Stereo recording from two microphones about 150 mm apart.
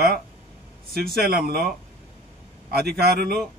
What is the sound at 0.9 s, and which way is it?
Speech, 90° right.